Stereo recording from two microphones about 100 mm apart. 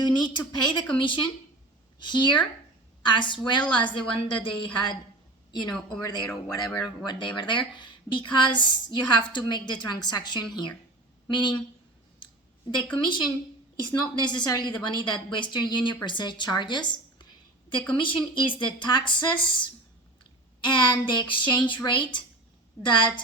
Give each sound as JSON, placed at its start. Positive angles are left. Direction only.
{"t": 0.2, "sound": "a woman's voice", "side_deg": 50}
{"t": 12.7, "sound": "a woman's voice", "side_deg": 50}
{"t": 20.7, "sound": "a woman's voice", "side_deg": 50}